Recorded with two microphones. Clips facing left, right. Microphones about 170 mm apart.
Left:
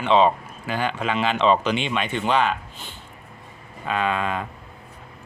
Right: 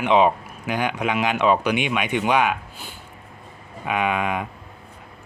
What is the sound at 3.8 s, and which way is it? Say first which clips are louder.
Speech: right 1 dB; 15° right (ahead or behind).